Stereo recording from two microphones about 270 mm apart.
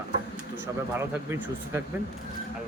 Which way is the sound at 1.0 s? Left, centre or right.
Centre.